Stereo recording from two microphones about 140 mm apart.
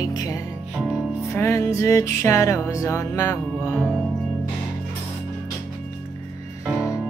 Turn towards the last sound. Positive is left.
turn(degrees=-5)  # may be behind; listen again after turning